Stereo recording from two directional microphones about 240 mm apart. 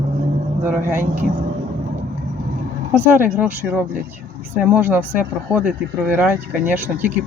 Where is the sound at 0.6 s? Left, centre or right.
Centre.